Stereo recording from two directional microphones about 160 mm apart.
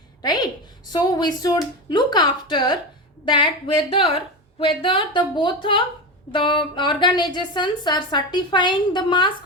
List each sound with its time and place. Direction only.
0.2 s a woman's voice: 25° left (ahead or behind)